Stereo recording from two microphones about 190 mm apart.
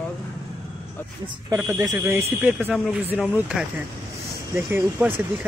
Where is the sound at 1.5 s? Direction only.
15° right (ahead or behind).